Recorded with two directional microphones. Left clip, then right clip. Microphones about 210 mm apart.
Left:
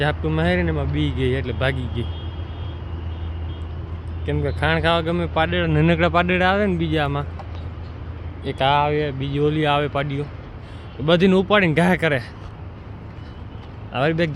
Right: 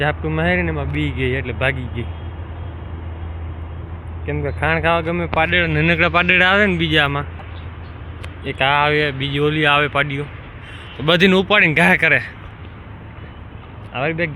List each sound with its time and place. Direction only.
0.0 s speech: 5° left (ahead or behind)
4.3 s speech: 15° left (ahead or behind)
8.4 s speech: 10° left (ahead or behind)
13.9 s speech: 35° left (ahead or behind)